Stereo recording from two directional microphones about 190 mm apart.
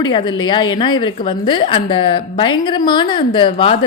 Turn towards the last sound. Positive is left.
turn(degrees=25)  # may be behind; listen again after turning